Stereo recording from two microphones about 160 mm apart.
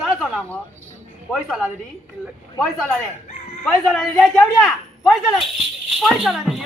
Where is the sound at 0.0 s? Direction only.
Centre (ahead or behind).